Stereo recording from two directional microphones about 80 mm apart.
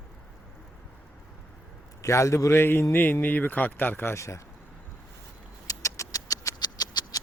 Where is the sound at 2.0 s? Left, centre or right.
Left.